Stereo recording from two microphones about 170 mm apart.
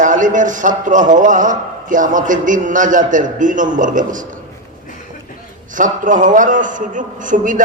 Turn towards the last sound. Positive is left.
turn(degrees=-50)  # may be behind; listen again after turning